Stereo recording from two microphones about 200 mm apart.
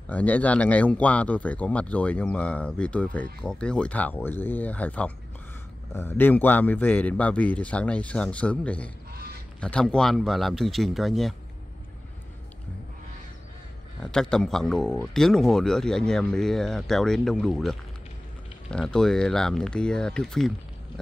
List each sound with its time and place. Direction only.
0.1 s speech: 10° left (ahead or behind)
9.1 s goose: 50° right (ahead or behind)
9.6 s speech: 5° left (ahead or behind)
14.1 s speech: 5° left (ahead or behind)